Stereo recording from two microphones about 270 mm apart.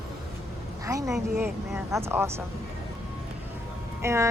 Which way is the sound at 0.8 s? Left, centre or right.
Centre.